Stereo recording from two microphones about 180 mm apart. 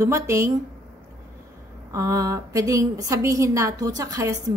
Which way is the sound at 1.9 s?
20° right (ahead or behind).